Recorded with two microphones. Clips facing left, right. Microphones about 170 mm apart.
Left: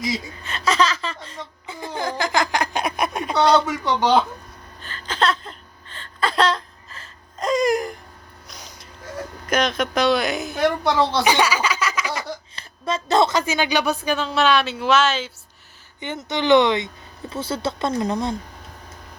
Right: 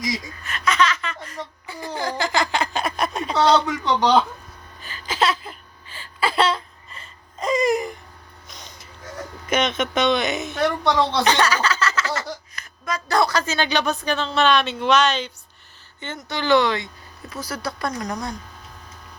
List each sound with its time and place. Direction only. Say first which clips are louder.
0.0 s a woman's voice: left 1 dB; 25° left (ahead or behind); by 4.2 s 5° left (ahead or behind)
4.8 s a sound: even; 10° right (ahead or behind)
9.5 s a woman's voice: even; centre (ahead or behind)
12.5 s speech: left 4 dB; 30° left (ahead or behind); by 15.3 s 5° left (ahead or behind)
16.0 s speech: left 4 dB; 20° left (ahead or behind)